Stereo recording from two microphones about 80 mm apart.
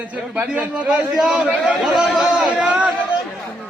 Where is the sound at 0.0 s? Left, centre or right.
Centre.